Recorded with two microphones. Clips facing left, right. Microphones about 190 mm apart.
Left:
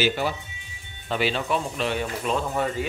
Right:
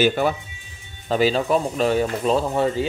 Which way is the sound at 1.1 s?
40° right (ahead or behind).